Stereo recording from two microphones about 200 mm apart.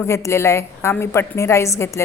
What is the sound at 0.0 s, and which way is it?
A woman's voice, 15° left (ahead or behind).